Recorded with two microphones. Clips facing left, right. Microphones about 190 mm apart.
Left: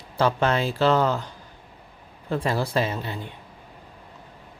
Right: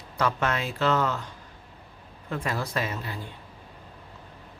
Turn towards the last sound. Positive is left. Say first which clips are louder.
# left 5 dB
turn(degrees=25)  # may be behind; listen again after turning